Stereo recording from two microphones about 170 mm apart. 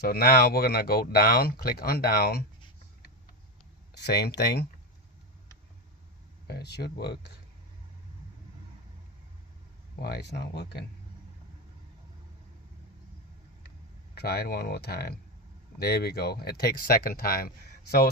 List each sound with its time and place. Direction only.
0.0 s speech: 65° left (ahead or behind)
3.9 s speech: 75° left (ahead or behind)
6.5 s speech: 75° left (ahead or behind)
10.0 s speech: 75° left (ahead or behind)
14.2 s speech: 70° left (ahead or behind)